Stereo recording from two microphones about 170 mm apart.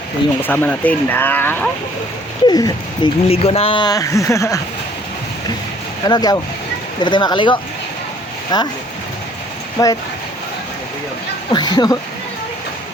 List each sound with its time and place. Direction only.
0.4 s speech: 10° left (ahead or behind)
2.5 s speech: 25° left (ahead or behind)
3.2 s speech: 35° left (ahead or behind); by 4.6 s 20° left (ahead or behind)
6.1 s speech: 20° left (ahead or behind)
9.8 s speech: 20° left (ahead or behind)
11.5 s speech: 25° left (ahead or behind)